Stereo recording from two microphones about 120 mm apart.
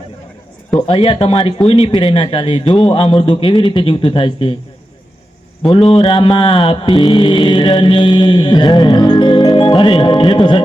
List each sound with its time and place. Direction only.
0.9 s speech: 50° left (ahead or behind)
5.9 s mantra: 40° left (ahead or behind)